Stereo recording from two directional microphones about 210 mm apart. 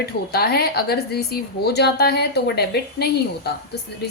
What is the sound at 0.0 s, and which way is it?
Speech, 50° left (ahead or behind).